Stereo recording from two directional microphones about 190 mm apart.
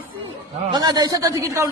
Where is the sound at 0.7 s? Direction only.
20° right (ahead or behind).